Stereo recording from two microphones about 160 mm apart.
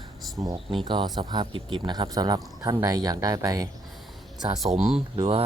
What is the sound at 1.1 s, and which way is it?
Speech, 25° right (ahead or behind).